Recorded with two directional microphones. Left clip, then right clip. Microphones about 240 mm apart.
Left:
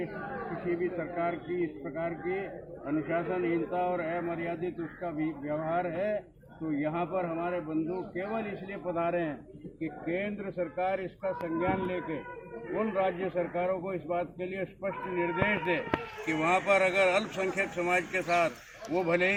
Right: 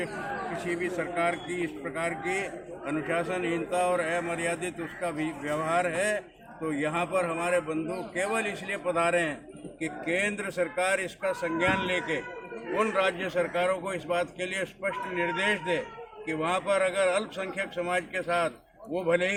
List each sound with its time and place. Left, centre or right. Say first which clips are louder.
0.8 s a man's voice: right 3 dB; centre